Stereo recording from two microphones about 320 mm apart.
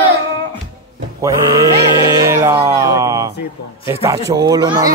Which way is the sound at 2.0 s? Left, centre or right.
Centre.